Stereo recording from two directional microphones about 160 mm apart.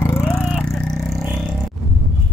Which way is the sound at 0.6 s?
Centre (ahead or behind).